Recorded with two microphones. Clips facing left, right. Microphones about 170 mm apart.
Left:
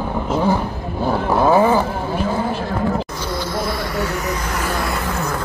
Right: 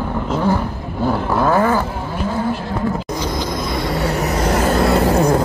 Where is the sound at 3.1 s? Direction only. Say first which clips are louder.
Right 2 dB; 15° right (ahead or behind); by 5.4 s 35° right (ahead or behind).